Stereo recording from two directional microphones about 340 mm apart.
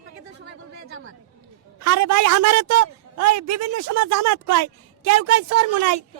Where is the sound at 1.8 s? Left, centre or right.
Right.